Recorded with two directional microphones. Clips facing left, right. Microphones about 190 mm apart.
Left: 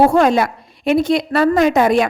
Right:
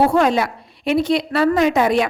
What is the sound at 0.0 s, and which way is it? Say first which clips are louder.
A woman's voice: left 3 dB; 45° left (ahead or behind).